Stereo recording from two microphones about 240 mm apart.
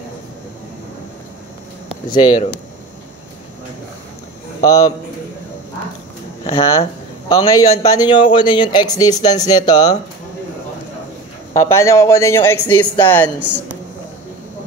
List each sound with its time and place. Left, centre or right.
2.0 s speech: centre
4.6 s speech: centre
6.5 s a man's voice: left
11.5 s speech: centre